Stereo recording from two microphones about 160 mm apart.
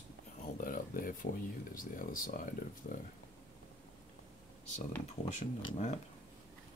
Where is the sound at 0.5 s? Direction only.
60° left (ahead or behind).